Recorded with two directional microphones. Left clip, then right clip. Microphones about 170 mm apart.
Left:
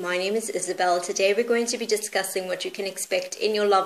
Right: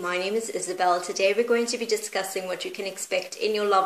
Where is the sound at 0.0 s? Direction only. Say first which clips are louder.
Left 1 dB; 35° left (ahead or behind).